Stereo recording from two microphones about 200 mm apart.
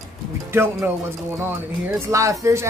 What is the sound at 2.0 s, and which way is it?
Speech, 15° right (ahead or behind).